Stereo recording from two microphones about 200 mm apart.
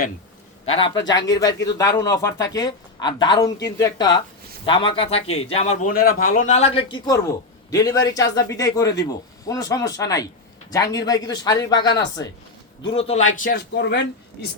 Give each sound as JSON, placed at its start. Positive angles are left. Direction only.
{"t": 0.6, "sound": "a man's voice", "side_deg": 25}
{"t": 5.9, "sound": "a man's voice", "side_deg": 45}